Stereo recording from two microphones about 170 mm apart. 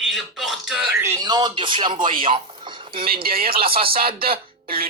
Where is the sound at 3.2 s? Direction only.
60° right (ahead or behind).